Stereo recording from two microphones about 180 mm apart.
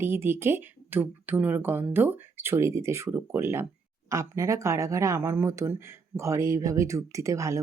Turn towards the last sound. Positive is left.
turn(degrees=-15)  # may be behind; listen again after turning